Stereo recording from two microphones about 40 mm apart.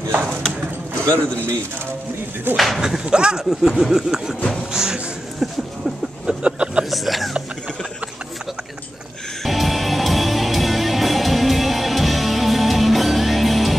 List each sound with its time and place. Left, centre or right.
2.5 s speech: centre
2.8 s speech: centre
3.4 s a sound: centre
4.7 s music: centre
6.2 s a sound: right
6.9 s speech: centre
9.4 s music: centre